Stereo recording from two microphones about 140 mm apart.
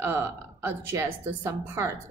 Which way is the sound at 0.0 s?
15° right (ahead or behind).